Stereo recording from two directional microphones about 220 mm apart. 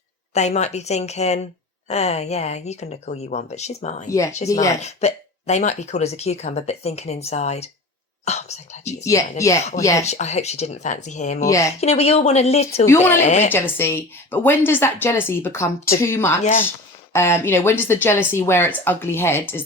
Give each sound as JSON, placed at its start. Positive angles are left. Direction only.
{"t": 0.3, "sound": "speech", "side_deg": 30}
{"t": 9.4, "sound": "a woman's voice", "side_deg": 15}
{"t": 10.0, "sound": "speech", "side_deg": 30}
{"t": 11.3, "sound": "a woman's voice", "side_deg": 15}
{"t": 11.8, "sound": "speech", "side_deg": 30}
{"t": 13.5, "sound": "a woman's voice", "side_deg": 10}
{"t": 16.4, "sound": "speech", "side_deg": 35}
{"t": 17.1, "sound": "a woman's voice", "side_deg": 10}